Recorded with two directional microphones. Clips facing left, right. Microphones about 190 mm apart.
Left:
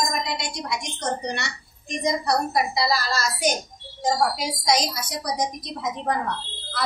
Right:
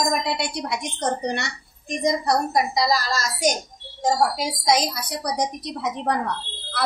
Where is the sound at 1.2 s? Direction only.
50° right (ahead or behind).